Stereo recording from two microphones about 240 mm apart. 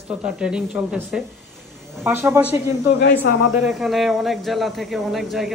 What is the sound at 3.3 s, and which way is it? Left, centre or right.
Speech, left.